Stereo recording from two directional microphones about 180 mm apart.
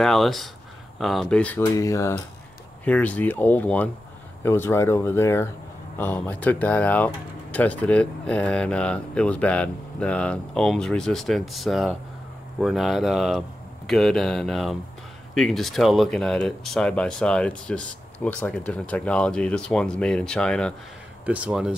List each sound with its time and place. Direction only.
0.0 s speech: centre (ahead or behind)
1.6 s speech: 15° left (ahead or behind)
21.3 s speech: 5° right (ahead or behind)